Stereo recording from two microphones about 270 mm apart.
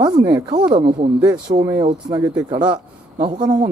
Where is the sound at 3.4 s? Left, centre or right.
Centre.